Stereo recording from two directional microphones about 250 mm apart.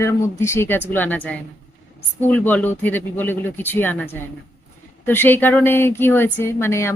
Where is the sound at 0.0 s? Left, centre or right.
Centre.